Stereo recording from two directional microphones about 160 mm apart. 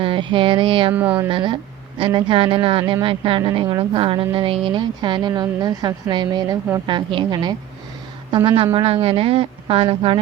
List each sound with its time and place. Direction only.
0.0 s speech: 30° right (ahead or behind)
0.9 s speech: 10° right (ahead or behind)
1.3 s speech: 30° right (ahead or behind)
8.7 s speech: 40° right (ahead or behind)